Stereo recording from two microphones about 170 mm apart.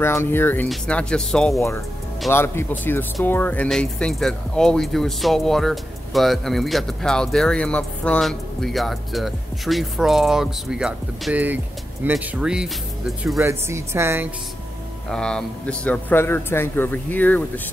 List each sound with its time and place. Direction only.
0.0 s a man's voice: 15° left (ahead or behind)
2.3 s a man's voice: 15° left (ahead or behind)
13.4 s speech: 15° right (ahead or behind)
15.0 s a man's voice: 5° left (ahead or behind)